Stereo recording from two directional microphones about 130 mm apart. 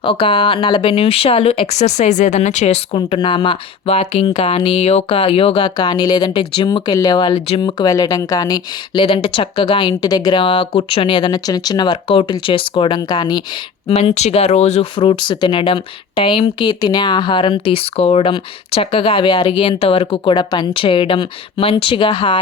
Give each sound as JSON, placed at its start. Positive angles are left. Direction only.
{"t": 0.0, "sound": "speech", "side_deg": 40}
{"t": 2.9, "sound": "speech", "side_deg": 40}
{"t": 9.0, "sound": "speech", "side_deg": 45}
{"t": 13.8, "sound": "speech", "side_deg": 50}
{"t": 14.9, "sound": "speech", "side_deg": 40}